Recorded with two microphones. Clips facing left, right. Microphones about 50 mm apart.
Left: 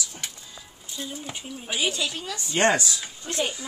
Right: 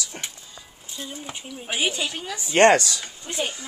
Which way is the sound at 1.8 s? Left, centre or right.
Right.